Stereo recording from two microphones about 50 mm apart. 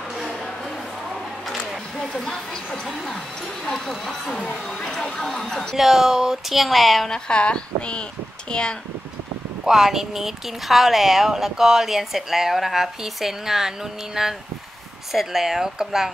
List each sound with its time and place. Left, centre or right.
2.0 s speech: centre
5.8 s speech: centre
7.1 s speech: centre
9.7 s speech: centre